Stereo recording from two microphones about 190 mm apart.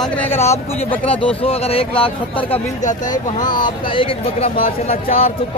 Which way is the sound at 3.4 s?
25° left (ahead or behind).